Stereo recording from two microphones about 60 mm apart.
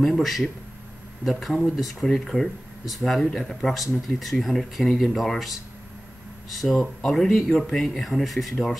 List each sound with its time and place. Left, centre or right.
0.0 s speech: centre
6.5 s speech: centre